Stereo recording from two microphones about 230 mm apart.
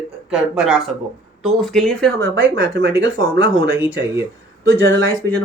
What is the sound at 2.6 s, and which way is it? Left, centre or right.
Speech, right.